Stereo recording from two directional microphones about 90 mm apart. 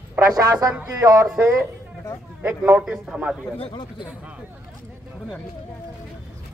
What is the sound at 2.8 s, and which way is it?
Speech, 10° right (ahead or behind).